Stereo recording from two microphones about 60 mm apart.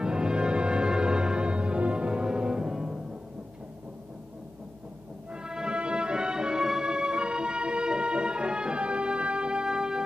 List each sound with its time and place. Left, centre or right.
0.0 s music: centre
5.3 s music: centre